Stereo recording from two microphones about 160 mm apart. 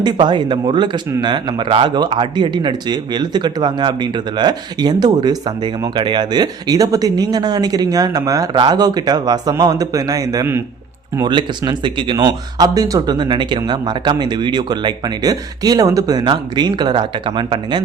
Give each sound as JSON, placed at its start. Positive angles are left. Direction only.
{"t": 0.0, "sound": "speech", "side_deg": -30}